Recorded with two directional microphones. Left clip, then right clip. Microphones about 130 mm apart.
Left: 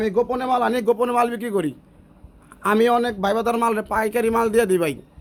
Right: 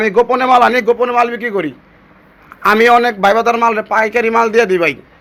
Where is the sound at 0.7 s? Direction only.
65° left (ahead or behind).